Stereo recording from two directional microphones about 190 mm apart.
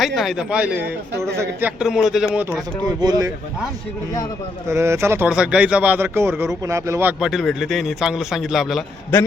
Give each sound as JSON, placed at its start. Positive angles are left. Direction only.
{"t": 0.0, "sound": "speech", "side_deg": 0}
{"t": 1.8, "sound": "speech", "side_deg": -5}
{"t": 3.0, "sound": "speech", "side_deg": -20}
{"t": 4.7, "sound": "speech", "side_deg": -15}
{"t": 7.2, "sound": "speech", "side_deg": 0}